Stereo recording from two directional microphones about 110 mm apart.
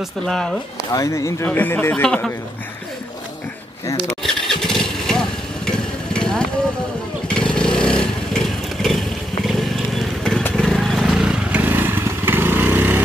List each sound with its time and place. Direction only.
0.3 s speech: 5° left (ahead or behind)
0.9 s speech: 30° left (ahead or behind)
4.2 s engine starting: 5° left (ahead or behind)
5.7 s vehicle: 5° left (ahead or behind)
7.3 s motorcycle: 10° left (ahead or behind)
10.5 s vehicle: 5° left (ahead or behind); by 13.0 s 20° right (ahead or behind)